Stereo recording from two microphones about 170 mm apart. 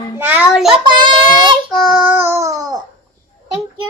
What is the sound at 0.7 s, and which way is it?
Child singing, 30° right (ahead or behind).